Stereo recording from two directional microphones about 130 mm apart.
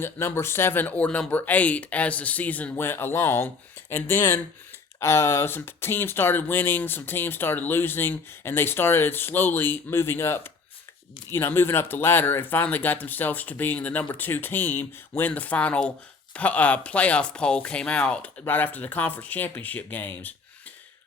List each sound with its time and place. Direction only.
0.0 s speech: 20° left (ahead or behind)